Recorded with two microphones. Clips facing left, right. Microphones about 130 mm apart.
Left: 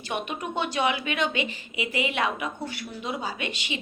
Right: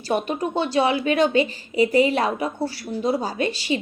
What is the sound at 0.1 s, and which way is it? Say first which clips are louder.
A woman's voice: right 8 dB; 35° right (ahead or behind).